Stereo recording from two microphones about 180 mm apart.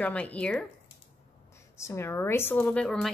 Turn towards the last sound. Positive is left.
turn(degrees=5)  # may be behind; listen again after turning